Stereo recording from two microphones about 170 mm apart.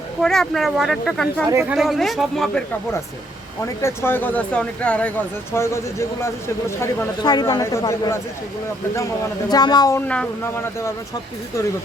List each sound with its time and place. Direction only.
0.2 s speech: centre (ahead or behind)
3.8 s speech: 15° left (ahead or behind)
9.5 s a woman's voice: 25° left (ahead or behind)
10.1 s speech: 10° left (ahead or behind)